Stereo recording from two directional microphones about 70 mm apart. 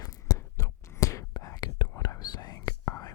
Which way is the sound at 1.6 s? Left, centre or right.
Left.